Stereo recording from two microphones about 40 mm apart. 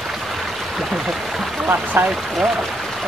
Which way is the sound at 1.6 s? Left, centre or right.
Right.